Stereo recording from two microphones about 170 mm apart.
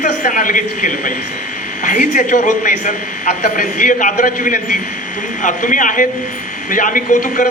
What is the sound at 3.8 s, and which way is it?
A man's voice, 50° left (ahead or behind).